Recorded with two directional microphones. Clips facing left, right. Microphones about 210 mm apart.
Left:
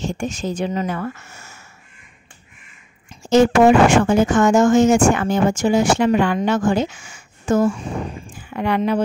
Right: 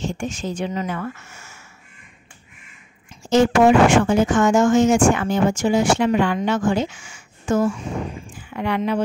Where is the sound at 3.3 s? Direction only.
45° left (ahead or behind).